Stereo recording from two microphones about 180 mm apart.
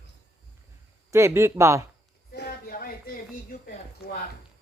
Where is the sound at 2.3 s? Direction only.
60° left (ahead or behind).